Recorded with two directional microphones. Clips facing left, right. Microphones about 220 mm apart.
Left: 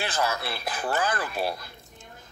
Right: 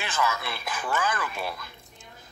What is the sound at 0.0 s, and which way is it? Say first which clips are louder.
Speech: left 1 dB; 35° left (ahead or behind).